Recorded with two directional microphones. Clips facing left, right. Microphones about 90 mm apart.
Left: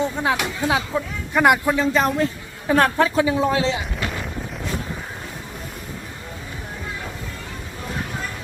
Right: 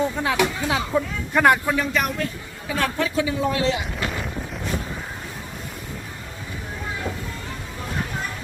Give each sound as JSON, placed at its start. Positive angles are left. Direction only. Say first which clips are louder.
{"t": 0.2, "sound": "speech", "louder": "even", "side_deg": 20}
{"t": 0.9, "sound": "speech", "louder": "even", "side_deg": 0}
{"t": 1.7, "sound": "speech", "louder": "left 4 dB", "side_deg": 25}
{"t": 2.6, "sound": "a woman's voice", "louder": "left 7 dB", "side_deg": 45}
{"t": 3.9, "sound": "boat", "louder": "even", "side_deg": 0}